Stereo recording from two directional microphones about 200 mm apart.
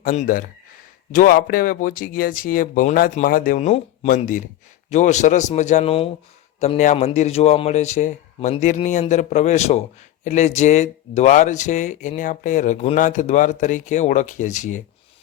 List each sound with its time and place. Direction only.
0.0 s speech: 40° left (ahead or behind)